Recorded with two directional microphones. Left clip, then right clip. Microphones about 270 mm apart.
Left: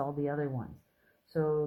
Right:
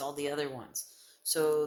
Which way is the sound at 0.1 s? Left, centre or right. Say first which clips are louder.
Even; right.